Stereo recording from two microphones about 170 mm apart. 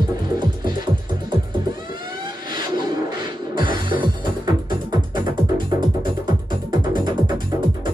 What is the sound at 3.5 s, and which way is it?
Music, 25° right (ahead or behind).